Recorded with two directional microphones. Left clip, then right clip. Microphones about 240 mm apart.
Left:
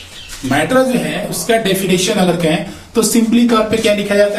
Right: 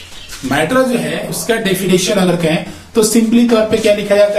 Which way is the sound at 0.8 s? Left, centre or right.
Centre.